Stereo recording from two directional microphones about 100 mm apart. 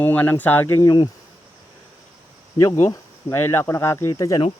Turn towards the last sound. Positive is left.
turn(degrees=35)  # may be behind; listen again after turning